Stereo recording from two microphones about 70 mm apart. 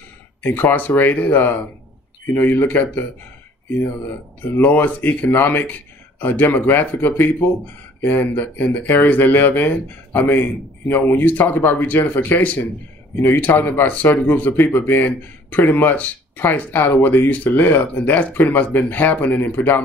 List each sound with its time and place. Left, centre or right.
0.4 s speech: left
4.6 s speech: left